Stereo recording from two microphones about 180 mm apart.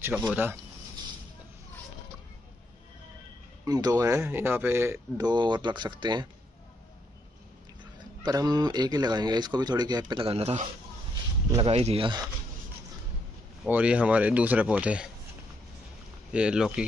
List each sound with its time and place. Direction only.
0.3 s speech: 10° right (ahead or behind)
3.6 s speech: 20° right (ahead or behind)
7.8 s speech: 25° right (ahead or behind)
13.7 s speech: 10° right (ahead or behind)
16.3 s speech: 5° right (ahead or behind)